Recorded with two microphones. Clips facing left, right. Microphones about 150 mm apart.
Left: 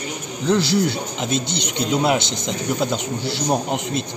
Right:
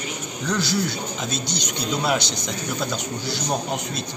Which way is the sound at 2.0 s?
20° left (ahead or behind).